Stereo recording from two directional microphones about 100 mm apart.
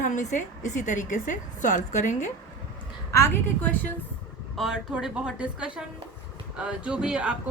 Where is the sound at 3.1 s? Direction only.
25° left (ahead or behind).